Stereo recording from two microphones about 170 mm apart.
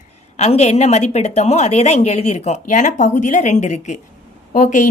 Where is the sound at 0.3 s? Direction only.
40° left (ahead or behind).